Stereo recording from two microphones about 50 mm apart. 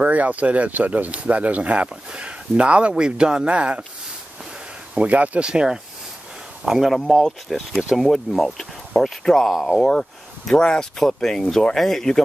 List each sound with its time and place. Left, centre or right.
0.0 s speech: right
4.9 s speech: right
5.4 s speech: centre
6.6 s speech: centre
9.5 s speech: centre
9.8 s speech: centre